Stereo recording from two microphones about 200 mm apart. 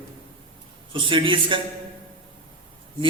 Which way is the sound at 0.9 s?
25° right (ahead or behind).